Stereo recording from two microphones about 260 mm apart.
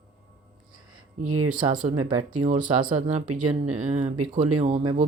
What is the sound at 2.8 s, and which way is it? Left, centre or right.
Speech, right.